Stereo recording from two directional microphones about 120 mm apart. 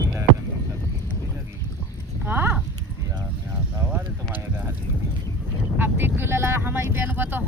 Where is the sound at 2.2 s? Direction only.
15° right (ahead or behind).